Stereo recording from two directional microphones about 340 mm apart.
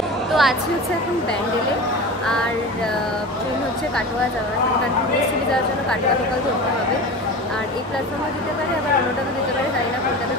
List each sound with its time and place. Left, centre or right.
0.3 s a woman's voice: centre